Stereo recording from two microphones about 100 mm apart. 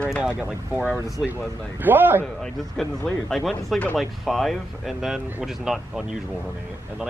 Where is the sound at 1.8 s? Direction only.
20° right (ahead or behind).